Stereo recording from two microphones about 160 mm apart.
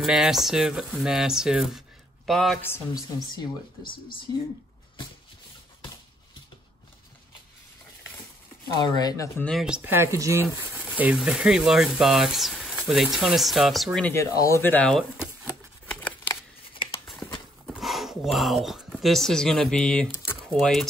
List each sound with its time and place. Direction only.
0.0 s speech: 5° right (ahead or behind)
2.6 s a woman's voice: 20° left (ahead or behind)
3.8 s speech: 65° left (ahead or behind)
8.8 s a woman's voice: 25° left (ahead or behind)
9.4 s speech: centre (ahead or behind)
9.8 s speech: 15° right (ahead or behind)
14.1 s speech: 20° left (ahead or behind)
15.9 s a sound: 10° left (ahead or behind)
16.3 s a sound: 30° left (ahead or behind)
17.6 s speech: centre (ahead or behind)